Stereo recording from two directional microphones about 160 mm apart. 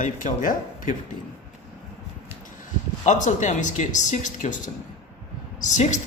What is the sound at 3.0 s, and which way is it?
A man's voice, 50° left (ahead or behind).